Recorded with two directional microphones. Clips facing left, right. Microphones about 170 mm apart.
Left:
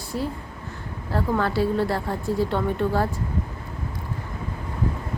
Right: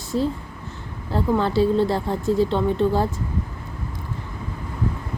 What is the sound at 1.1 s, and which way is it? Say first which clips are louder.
Speech: right 3 dB; 25° right (ahead or behind).